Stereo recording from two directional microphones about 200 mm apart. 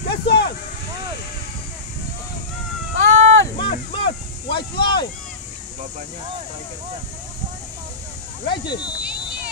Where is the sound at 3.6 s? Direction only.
25° left (ahead or behind).